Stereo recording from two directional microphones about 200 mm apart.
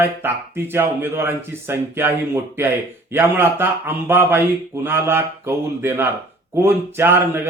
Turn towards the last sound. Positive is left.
turn(degrees=-10)  # may be behind; listen again after turning